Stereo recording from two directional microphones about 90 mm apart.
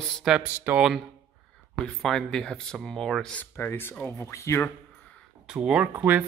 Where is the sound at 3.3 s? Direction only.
20° left (ahead or behind).